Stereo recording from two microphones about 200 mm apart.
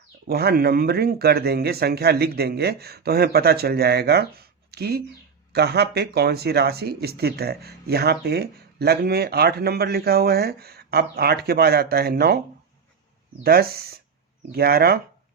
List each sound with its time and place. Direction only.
0.3 s speech: 50° right (ahead or behind)
13.4 s speech: 50° right (ahead or behind)